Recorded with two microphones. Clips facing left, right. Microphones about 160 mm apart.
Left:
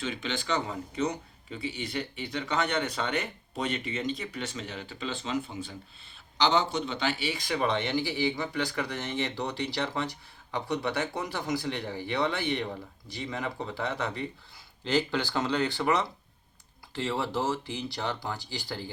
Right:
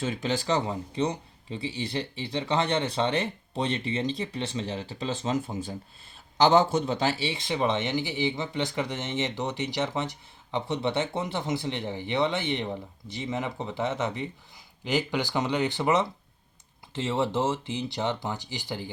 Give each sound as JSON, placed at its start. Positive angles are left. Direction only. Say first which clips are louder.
{"t": 0.0, "sound": "a man's voice", "louder": "right 5 dB", "side_deg": -40}